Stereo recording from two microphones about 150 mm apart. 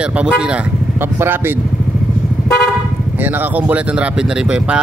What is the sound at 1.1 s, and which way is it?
Speech, 15° right (ahead or behind).